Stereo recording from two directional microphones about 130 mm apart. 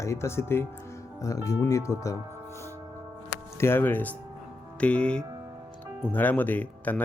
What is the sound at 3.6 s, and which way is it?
Speech, 15° left (ahead or behind).